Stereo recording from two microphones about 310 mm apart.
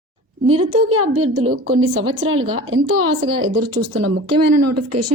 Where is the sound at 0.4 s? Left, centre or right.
Right.